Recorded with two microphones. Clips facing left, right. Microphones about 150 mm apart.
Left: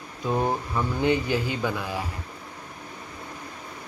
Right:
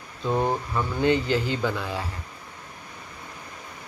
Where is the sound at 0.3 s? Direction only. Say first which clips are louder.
Right 1 dB; 5° left (ahead or behind).